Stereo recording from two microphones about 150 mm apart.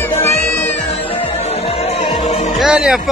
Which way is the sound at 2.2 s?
45° left (ahead or behind).